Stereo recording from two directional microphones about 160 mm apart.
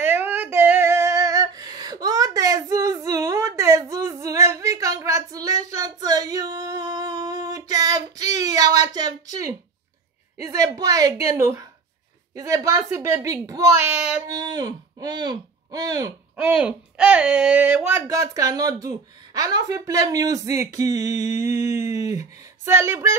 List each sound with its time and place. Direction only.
0.0 s female singing: 15° right (ahead or behind)
5.7 s a sound: 20° right (ahead or behind)
10.4 s speech: 20° right (ahead or behind)
16.3 s speech: 10° right (ahead or behind)